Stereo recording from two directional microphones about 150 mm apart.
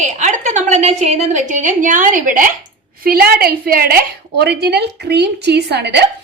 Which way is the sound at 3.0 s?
85° right.